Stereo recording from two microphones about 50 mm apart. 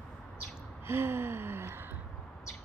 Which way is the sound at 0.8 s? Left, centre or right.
Right.